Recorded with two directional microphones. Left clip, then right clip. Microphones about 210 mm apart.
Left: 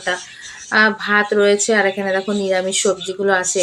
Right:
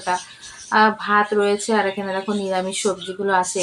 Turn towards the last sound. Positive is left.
turn(degrees=15)  # may be behind; listen again after turning